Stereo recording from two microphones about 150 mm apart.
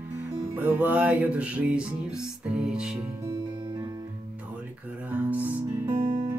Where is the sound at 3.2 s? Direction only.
30° right (ahead or behind).